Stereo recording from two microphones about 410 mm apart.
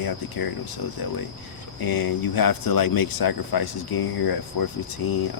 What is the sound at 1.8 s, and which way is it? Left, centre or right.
Speech, left.